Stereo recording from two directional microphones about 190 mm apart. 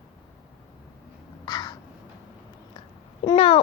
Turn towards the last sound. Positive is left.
turn(degrees=30)  # may be behind; listen again after turning